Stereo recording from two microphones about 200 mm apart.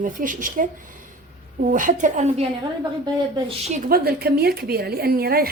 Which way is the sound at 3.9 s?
50° right (ahead or behind).